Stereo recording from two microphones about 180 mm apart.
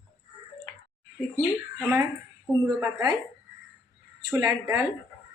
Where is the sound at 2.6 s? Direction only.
20° right (ahead or behind).